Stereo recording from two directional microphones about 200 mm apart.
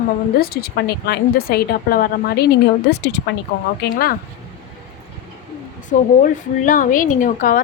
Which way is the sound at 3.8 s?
50° left (ahead or behind).